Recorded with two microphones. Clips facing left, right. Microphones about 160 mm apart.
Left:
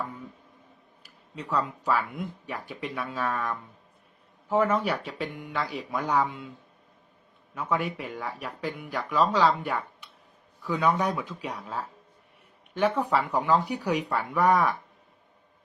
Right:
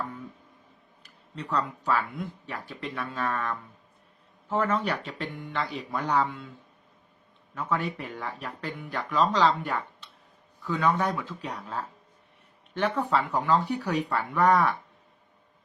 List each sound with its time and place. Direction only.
1.0 s speech: 10° left (ahead or behind)
7.5 s speech: 10° left (ahead or behind)